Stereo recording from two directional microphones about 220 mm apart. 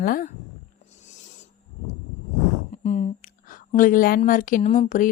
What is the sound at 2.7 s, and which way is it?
A woman's voice, 30° left (ahead or behind).